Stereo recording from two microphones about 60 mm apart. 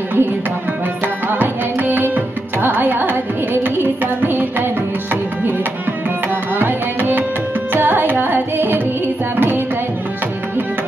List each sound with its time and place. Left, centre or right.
1.0 s music: right
6.2 s music: right
7.7 s carnatic music: right